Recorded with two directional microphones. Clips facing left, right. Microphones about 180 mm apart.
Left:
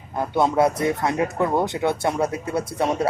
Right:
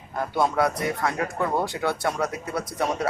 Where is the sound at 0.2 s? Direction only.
25° left (ahead or behind).